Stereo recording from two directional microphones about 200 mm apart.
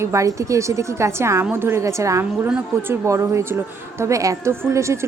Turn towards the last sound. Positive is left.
turn(degrees=-15)  # may be behind; listen again after turning